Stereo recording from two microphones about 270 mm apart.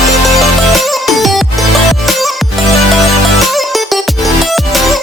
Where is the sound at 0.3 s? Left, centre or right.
Centre.